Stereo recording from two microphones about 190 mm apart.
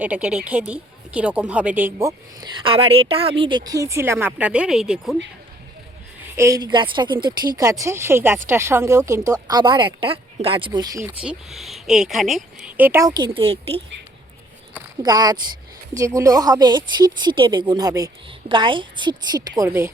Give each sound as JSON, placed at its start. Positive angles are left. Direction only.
{"t": 0.0, "sound": "speech", "side_deg": -5}
{"t": 2.6, "sound": "speech", "side_deg": -30}
{"t": 6.3, "sound": "speech", "side_deg": -15}
{"t": 11.2, "sound": "speech", "side_deg": -5}
{"t": 15.0, "sound": "speech", "side_deg": -20}